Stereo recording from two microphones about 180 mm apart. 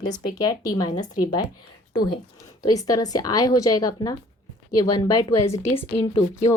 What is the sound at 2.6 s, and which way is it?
A woman's voice, 20° left (ahead or behind).